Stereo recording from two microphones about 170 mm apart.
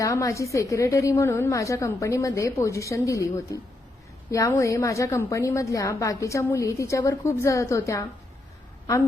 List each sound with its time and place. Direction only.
0.0 s a woman's voice: 20° left (ahead or behind)